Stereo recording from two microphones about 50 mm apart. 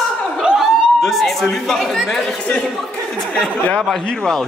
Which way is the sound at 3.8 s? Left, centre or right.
Centre.